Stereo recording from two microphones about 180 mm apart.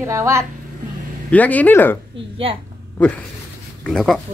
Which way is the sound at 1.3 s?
10° left (ahead or behind).